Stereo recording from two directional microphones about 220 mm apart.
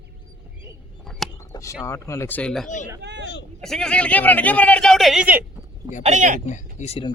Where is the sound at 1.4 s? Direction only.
15° left (ahead or behind).